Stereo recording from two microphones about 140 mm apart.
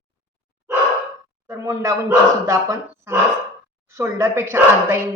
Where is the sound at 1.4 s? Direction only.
20° right (ahead or behind).